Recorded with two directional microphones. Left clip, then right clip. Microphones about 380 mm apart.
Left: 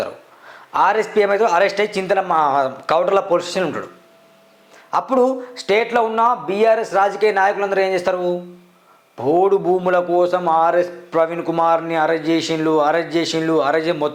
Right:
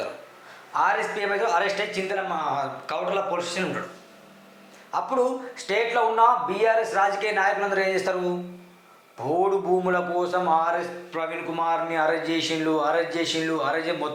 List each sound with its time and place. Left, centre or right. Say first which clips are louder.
0.7 s a man's voice: left 7 dB; left
4.9 s a man's voice: left 7 dB; left
9.1 s a man's voice: left 8 dB; left